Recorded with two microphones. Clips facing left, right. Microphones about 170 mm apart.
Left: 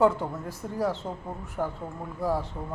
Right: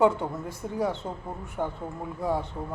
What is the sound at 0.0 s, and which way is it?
Speech, 5° left (ahead or behind).